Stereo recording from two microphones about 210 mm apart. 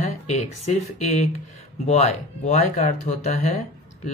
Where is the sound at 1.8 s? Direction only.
30° left (ahead or behind).